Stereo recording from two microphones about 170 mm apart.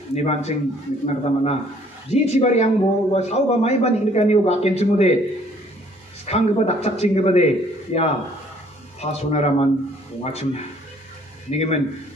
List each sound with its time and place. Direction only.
0.1 s a man's voice: 40° left (ahead or behind)
6.2 s a man's voice: 40° left (ahead or behind)